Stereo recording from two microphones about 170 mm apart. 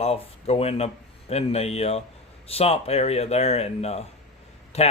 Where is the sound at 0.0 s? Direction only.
35° left (ahead or behind).